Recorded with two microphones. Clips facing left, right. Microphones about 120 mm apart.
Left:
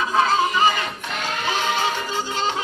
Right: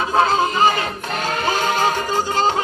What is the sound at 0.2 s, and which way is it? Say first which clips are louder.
Music: right 3 dB; 35° right (ahead or behind).